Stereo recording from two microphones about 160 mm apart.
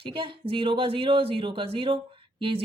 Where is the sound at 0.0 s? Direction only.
30° right (ahead or behind).